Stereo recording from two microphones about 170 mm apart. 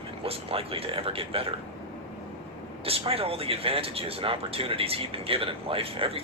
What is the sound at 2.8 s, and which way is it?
Speech, 35° right (ahead or behind).